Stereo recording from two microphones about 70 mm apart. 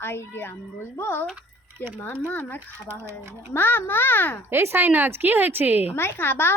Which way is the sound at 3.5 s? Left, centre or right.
Left.